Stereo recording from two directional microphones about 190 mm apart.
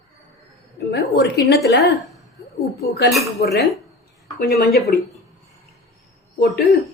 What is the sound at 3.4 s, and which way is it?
Speech, 60° left (ahead or behind).